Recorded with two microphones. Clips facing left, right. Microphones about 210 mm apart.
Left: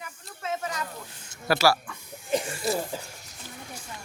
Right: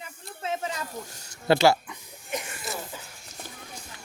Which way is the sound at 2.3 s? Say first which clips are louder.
Left 7 dB; 30° left (ahead or behind).